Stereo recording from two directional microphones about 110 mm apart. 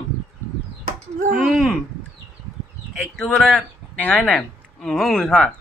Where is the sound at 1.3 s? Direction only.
5° right (ahead or behind).